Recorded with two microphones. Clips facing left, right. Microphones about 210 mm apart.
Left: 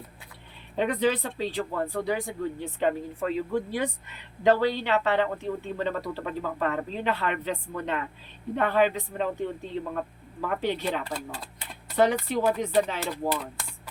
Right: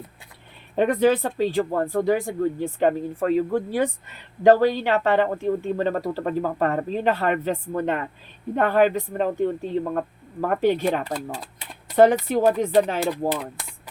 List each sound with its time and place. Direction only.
0.8 s speech: 45° right (ahead or behind)